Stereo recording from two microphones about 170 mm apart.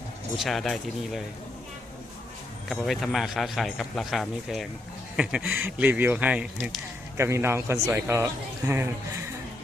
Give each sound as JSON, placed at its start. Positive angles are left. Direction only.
{"t": 0.3, "sound": "a man's voice", "side_deg": 0}
{"t": 2.6, "sound": "a man's voice", "side_deg": 0}